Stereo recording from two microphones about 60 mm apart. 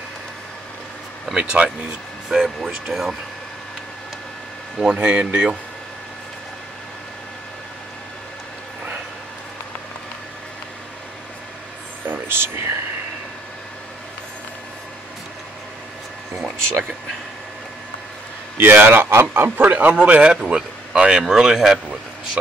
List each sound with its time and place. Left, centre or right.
1.3 s speech: centre
2.4 s speech: centre
4.8 s speech: centre
12.1 s speech: right
18.6 s speech: right
20.4 s speech: centre